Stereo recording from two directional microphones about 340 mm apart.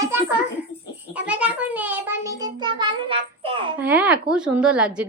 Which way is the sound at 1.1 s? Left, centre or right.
Centre.